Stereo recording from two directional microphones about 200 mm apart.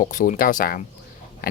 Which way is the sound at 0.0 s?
40° left (ahead or behind).